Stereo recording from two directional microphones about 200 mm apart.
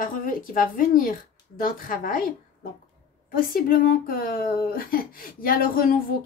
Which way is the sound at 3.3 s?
45° left (ahead or behind).